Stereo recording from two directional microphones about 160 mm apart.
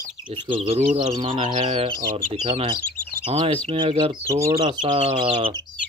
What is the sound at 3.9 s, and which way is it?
Speech, 20° right (ahead or behind).